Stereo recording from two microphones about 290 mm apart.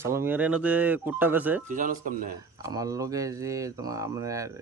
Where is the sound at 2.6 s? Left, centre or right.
Centre.